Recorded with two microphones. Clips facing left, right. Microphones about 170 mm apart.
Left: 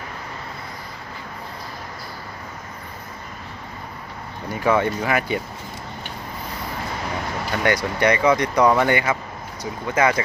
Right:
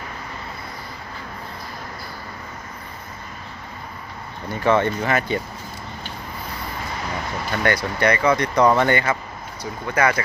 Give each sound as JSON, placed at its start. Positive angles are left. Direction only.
{"t": 4.4, "sound": "speech", "side_deg": 10}
{"t": 7.6, "sound": "speech", "side_deg": 15}